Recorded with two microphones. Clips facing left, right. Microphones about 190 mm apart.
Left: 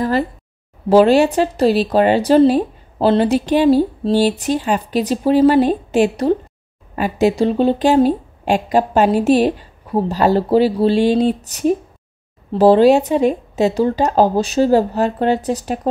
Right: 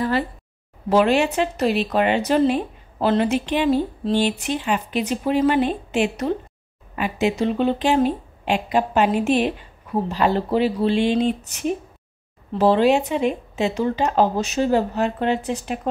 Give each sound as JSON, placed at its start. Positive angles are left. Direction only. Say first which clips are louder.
{"t": 0.0, "sound": "a woman's voice", "louder": "left 4 dB", "side_deg": 40}